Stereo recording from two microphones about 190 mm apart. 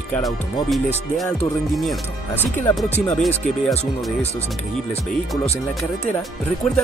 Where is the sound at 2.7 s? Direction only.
10° left (ahead or behind).